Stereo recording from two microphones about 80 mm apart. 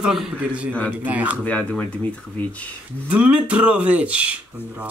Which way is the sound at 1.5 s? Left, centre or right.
Centre.